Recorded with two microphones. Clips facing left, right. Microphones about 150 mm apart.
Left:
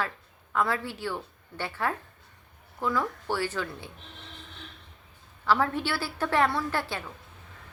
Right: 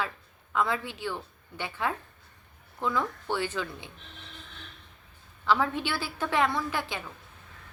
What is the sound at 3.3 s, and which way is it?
Speech, 20° right (ahead or behind).